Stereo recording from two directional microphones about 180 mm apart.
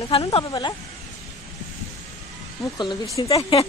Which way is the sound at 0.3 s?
20° left (ahead or behind).